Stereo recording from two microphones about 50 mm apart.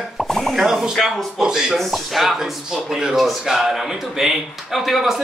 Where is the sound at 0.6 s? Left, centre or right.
Centre.